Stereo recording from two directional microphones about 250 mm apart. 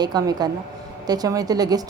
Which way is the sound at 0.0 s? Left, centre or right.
Centre.